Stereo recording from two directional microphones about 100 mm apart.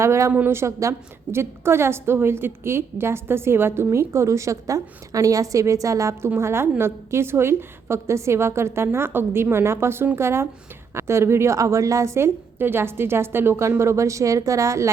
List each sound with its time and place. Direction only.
0.0 s a woman's voice: 30° right (ahead or behind)